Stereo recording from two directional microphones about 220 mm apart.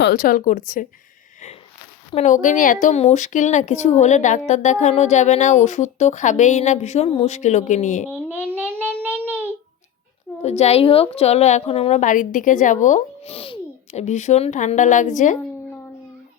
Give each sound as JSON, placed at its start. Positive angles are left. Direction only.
{"t": 0.0, "sound": "a woman's voice", "side_deg": 40}
{"t": 2.1, "sound": "a woman's voice", "side_deg": 35}
{"t": 8.0, "sound": "a sound", "side_deg": -10}
{"t": 9.0, "sound": "child singing", "side_deg": -10}
{"t": 10.4, "sound": "a woman's voice", "side_deg": 30}